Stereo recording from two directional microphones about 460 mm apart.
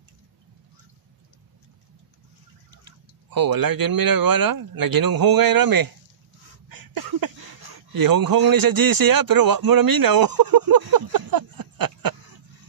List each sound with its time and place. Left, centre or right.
2.8 s speech: right
6.7 s a sound: right
7.9 s a man's voice: right